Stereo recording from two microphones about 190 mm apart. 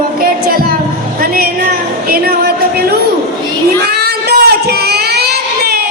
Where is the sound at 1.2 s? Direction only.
50° right (ahead or behind).